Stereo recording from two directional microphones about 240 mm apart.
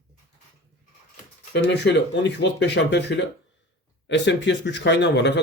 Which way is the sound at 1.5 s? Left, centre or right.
Left.